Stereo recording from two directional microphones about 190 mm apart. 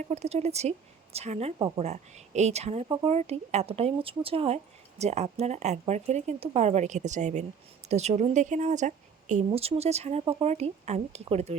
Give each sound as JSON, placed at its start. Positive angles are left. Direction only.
{"t": 0.0, "sound": "speech", "side_deg": -35}
{"t": 1.5, "sound": "speech", "side_deg": -20}
{"t": 1.8, "sound": "speech", "side_deg": -35}